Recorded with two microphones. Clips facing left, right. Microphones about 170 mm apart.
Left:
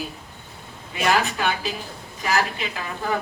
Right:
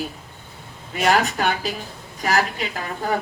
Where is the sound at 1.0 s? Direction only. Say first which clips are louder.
Right 2 dB; 45° right (ahead or behind).